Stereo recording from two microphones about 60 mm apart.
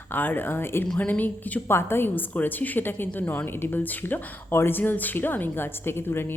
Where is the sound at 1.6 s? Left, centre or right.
Left.